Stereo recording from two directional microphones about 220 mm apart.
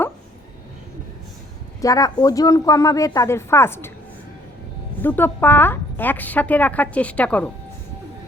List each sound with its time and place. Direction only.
1.8 s a woman's voice: 15° left (ahead or behind)
5.0 s a woman's voice: 10° left (ahead or behind)